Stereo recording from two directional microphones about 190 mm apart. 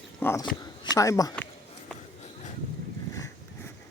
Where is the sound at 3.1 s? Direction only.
15° left (ahead or behind).